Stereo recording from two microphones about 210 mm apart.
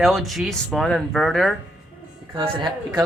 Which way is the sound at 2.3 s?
20° right (ahead or behind).